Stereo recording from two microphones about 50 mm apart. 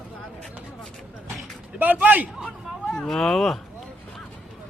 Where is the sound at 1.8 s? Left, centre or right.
Right.